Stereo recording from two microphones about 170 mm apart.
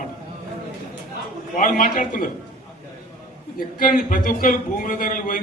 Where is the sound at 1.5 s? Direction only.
50° left (ahead or behind).